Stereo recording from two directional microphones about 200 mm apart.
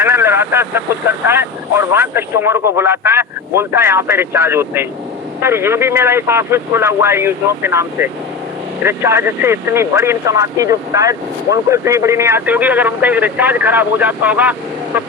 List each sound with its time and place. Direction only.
0.0 s vehicle: 10° right (ahead or behind)
1.3 s speech: 10° right (ahead or behind)